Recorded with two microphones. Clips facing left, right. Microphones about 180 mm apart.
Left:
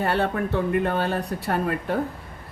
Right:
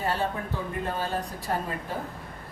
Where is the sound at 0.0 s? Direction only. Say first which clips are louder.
Left 6 dB; 65° left (ahead or behind).